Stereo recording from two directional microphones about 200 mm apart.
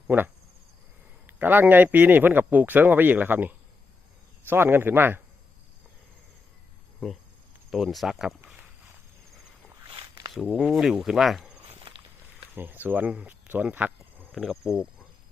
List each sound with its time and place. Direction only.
0.1 s a man's voice: 10° right (ahead or behind)
1.3 s a man's voice: 10° right (ahead or behind)
7.0 s speech: centre (ahead or behind)
9.8 s walk: 20° right (ahead or behind)
10.3 s speech: centre (ahead or behind)
11.7 s walk: 25° right (ahead or behind)
12.5 s speech: 10° right (ahead or behind)